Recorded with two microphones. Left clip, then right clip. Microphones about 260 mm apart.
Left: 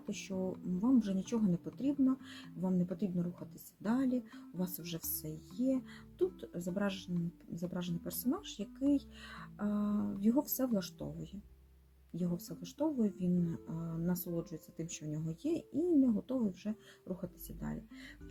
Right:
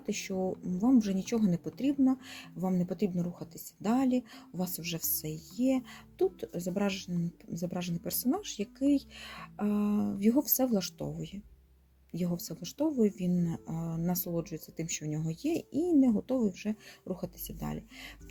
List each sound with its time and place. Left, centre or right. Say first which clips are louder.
0.1 s speech: right 7 dB; right